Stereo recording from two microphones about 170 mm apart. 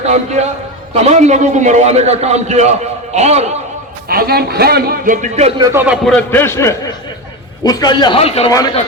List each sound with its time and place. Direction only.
0.0 s a man's voice: 40° right (ahead or behind)
4.1 s a man's voice: 65° right (ahead or behind); by 5.5 s 45° right (ahead or behind)
5.5 s speech: 20° right (ahead or behind)
5.8 s a man's voice: 5° right (ahead or behind)
6.1 s a man's voice: 10° left (ahead or behind); by 8.4 s 35° left (ahead or behind)
8.4 s a man's voice: 20° left (ahead or behind)